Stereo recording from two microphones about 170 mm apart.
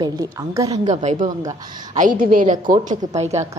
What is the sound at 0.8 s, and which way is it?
A woman's voice, 45° right (ahead or behind).